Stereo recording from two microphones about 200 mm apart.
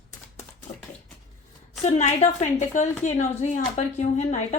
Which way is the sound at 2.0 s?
35° left (ahead or behind).